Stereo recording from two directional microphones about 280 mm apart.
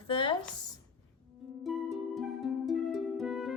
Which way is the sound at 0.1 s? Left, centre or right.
Centre.